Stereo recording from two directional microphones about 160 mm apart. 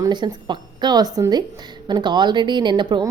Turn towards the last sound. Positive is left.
turn(degrees=-30)  # may be behind; listen again after turning